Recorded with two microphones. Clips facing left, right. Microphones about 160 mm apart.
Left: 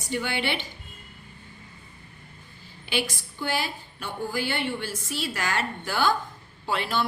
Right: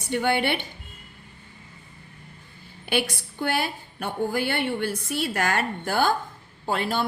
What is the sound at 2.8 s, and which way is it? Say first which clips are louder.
A woman's voice: right 3 dB; 55° right (ahead or behind).